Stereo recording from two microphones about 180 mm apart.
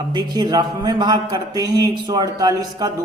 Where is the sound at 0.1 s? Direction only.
25° right (ahead or behind).